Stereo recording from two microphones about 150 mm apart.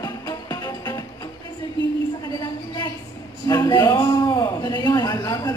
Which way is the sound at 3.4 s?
25° left (ahead or behind).